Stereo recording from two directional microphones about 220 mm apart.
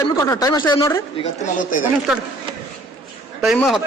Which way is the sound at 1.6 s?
40° left (ahead or behind).